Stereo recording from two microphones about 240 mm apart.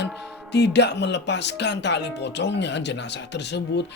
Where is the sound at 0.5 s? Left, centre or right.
Left.